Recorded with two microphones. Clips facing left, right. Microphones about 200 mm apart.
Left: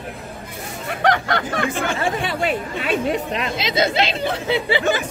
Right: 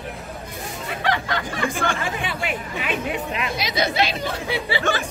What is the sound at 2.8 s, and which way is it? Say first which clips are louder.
Speech: left 5 dB; 35° left (ahead or behind).